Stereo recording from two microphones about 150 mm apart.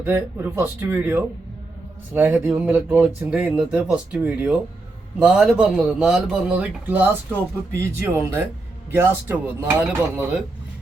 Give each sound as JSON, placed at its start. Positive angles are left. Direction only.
{"t": 0.0, "sound": "speech", "side_deg": -10}